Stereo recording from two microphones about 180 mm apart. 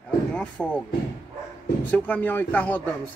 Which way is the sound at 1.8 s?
10° left (ahead or behind).